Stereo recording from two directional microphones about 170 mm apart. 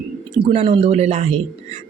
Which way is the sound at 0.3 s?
35° right (ahead or behind).